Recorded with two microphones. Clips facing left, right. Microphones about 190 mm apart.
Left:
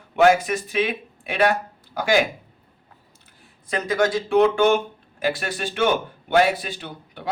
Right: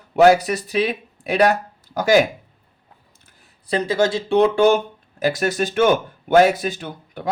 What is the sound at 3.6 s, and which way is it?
Speech, 35° right (ahead or behind).